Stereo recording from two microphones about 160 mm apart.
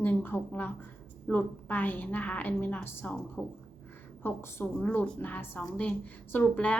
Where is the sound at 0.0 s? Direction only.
10° left (ahead or behind).